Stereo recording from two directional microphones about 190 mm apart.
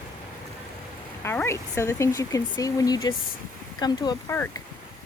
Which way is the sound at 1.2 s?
10° left (ahead or behind).